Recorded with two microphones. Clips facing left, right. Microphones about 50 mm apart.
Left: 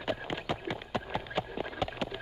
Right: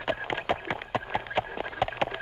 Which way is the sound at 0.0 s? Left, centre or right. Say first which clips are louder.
Right 4 dB; right.